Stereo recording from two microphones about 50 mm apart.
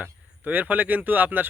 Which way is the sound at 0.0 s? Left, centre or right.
Right.